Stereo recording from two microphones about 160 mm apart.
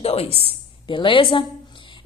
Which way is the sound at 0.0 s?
40° left (ahead or behind).